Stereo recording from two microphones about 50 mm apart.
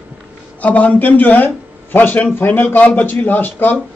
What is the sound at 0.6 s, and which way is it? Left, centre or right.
Speech, left.